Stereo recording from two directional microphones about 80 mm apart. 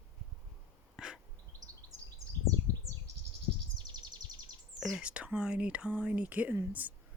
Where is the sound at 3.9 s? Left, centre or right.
Right.